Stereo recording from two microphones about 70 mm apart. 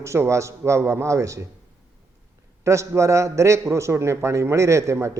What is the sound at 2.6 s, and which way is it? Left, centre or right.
A man's voice, right.